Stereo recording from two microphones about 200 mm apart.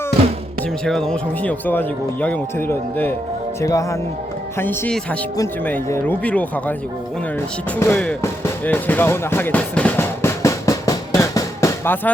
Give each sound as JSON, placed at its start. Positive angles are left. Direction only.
{"t": 0.9, "sound": "speech", "side_deg": 5}
{"t": 7.8, "sound": "music", "side_deg": 10}